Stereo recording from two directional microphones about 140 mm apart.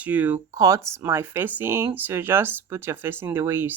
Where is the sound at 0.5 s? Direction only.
25° right (ahead or behind).